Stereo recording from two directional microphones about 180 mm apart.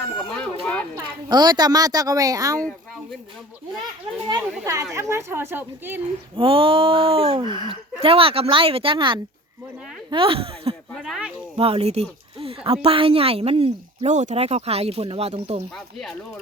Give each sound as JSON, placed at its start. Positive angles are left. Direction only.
{"t": 0.3, "sound": "speech", "side_deg": 5}
{"t": 0.6, "sound": "a sound", "side_deg": 5}
{"t": 0.9, "sound": "speech", "side_deg": -25}
{"t": 4.6, "sound": "speech", "side_deg": -15}
{"t": 6.3, "sound": "speech", "side_deg": -30}
{"t": 7.4, "sound": "speech", "side_deg": 25}
{"t": 7.7, "sound": "speech", "side_deg": -30}
{"t": 10.9, "sound": "speech", "side_deg": 0}
{"t": 11.5, "sound": "speech", "side_deg": -30}